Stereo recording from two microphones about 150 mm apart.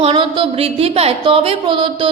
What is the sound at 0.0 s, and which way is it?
Speech, 35° right (ahead or behind).